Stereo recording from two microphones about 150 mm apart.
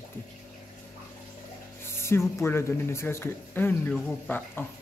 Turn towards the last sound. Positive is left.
turn(degrees=15)  # may be behind; listen again after turning